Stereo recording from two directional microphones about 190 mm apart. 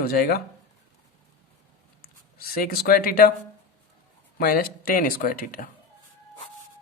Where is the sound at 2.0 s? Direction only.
50° left (ahead or behind).